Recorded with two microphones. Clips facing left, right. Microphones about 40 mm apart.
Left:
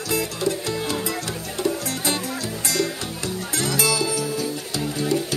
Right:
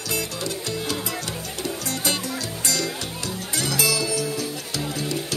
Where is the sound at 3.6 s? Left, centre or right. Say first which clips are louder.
Left 1 dB; left.